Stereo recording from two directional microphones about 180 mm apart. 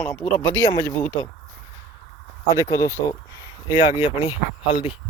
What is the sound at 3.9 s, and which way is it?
Speech, 30° left (ahead or behind).